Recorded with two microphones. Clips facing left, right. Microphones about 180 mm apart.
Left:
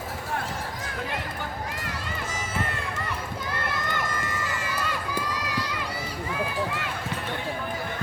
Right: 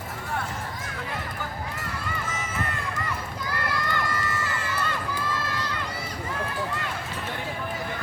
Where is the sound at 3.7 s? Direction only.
20° left (ahead or behind).